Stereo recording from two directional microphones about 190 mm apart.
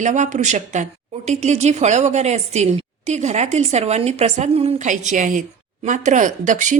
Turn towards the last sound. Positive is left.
turn(degrees=-40)  # may be behind; listen again after turning